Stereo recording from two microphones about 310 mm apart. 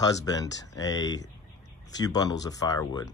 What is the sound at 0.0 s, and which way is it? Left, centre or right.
Speech, centre.